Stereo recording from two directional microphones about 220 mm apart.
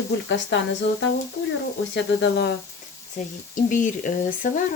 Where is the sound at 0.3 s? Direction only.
55° left (ahead or behind).